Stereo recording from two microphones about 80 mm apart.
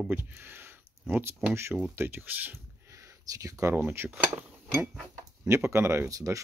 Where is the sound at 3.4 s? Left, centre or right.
Right.